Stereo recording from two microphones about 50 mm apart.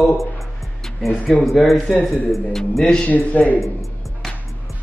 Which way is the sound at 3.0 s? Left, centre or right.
Left.